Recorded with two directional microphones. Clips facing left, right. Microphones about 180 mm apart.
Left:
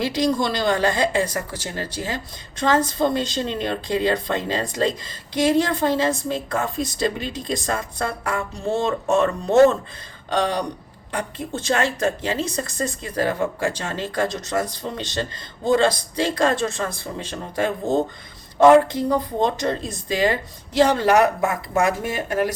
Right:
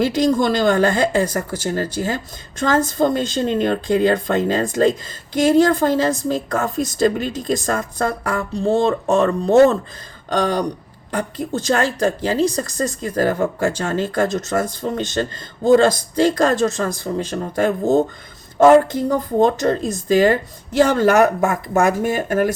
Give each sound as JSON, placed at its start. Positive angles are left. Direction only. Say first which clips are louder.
{"t": 0.0, "sound": "speech", "louder": "right 5 dB", "side_deg": -45}